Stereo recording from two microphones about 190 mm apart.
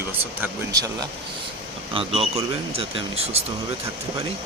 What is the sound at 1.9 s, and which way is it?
Speech, 30° right (ahead or behind).